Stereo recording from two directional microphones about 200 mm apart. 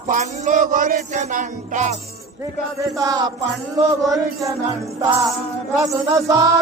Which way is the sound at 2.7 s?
15° right (ahead or behind).